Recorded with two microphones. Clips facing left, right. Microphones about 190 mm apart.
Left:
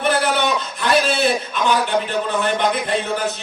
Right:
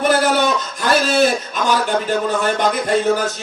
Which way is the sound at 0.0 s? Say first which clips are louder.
Right 3 dB; 40° right (ahead or behind).